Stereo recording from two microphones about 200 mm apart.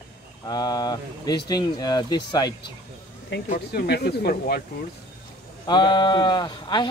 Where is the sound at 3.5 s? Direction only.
50° left (ahead or behind).